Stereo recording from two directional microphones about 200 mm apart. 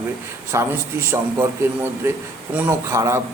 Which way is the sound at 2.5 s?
15° right (ahead or behind).